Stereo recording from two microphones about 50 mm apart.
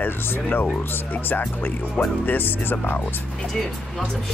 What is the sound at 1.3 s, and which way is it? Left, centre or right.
Speech, left.